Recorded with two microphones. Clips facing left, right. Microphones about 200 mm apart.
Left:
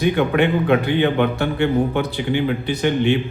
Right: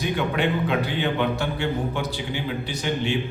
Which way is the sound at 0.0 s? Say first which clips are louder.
Left 7 dB; 55° left (ahead or behind).